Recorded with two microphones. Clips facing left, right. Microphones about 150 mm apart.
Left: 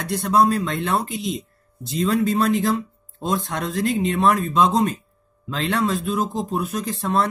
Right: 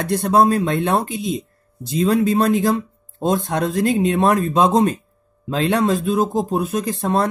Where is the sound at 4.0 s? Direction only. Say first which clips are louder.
Right 1 dB; 45° right (ahead or behind).